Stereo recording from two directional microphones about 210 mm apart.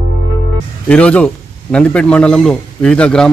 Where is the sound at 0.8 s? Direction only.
5° left (ahead or behind).